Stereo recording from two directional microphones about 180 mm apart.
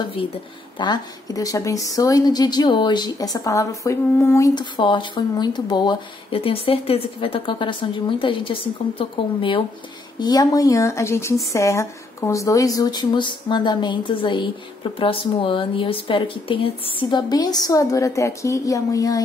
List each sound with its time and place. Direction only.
0.7 s speech: 20° left (ahead or behind)
4.6 s a woman's voice: 25° left (ahead or behind)